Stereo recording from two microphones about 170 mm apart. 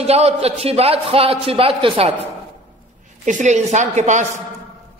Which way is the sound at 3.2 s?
45° right (ahead or behind).